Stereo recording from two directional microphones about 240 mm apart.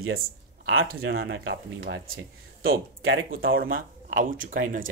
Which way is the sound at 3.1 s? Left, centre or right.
Right.